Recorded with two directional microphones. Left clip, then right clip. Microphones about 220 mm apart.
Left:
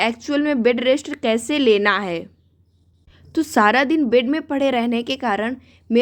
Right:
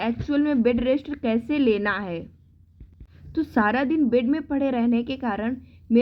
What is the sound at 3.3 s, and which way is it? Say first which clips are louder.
A woman's voice: left 7 dB; 30° left (ahead or behind).